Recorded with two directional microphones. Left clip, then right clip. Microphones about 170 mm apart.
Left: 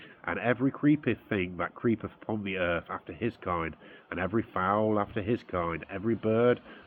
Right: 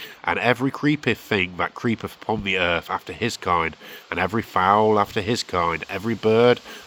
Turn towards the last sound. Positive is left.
turn(degrees=-30)  # may be behind; listen again after turning